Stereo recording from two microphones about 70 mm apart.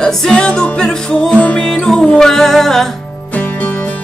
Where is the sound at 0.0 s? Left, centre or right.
Centre.